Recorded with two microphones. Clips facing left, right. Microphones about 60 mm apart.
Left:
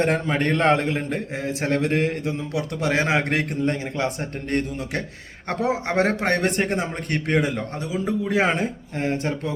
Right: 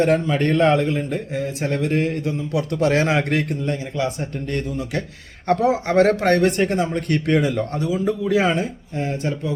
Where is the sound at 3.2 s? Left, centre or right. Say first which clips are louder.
Right 1 dB; left.